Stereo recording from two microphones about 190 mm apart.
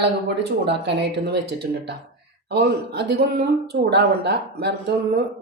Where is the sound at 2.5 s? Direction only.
65° right (ahead or behind).